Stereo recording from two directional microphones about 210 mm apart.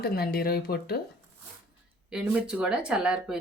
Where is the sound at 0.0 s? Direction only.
45° left (ahead or behind).